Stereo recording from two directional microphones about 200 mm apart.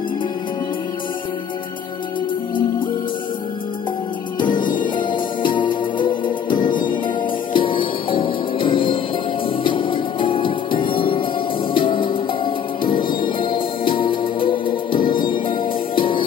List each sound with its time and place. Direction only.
4.4 s music: 25° left (ahead or behind)